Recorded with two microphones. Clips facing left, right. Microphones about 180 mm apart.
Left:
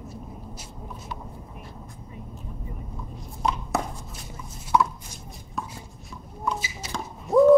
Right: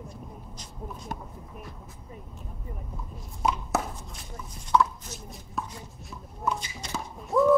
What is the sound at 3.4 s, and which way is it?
Chopping, 5° right (ahead or behind).